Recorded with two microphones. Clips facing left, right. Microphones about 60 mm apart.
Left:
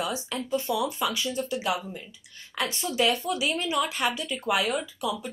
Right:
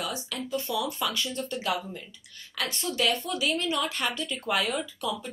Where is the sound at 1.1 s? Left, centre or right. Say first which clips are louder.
Left 3 dB; centre.